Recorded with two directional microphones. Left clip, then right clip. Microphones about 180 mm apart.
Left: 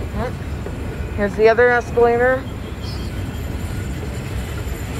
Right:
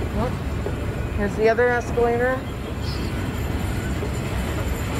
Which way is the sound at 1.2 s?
5° right (ahead or behind).